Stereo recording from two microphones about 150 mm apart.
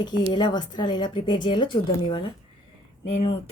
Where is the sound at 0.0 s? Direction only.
30° left (ahead or behind).